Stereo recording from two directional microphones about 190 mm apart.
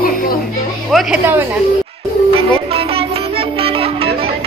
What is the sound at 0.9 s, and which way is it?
Speech, 10° right (ahead or behind).